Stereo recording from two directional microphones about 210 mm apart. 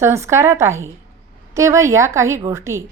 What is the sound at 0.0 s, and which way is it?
A woman's voice, 15° right (ahead or behind).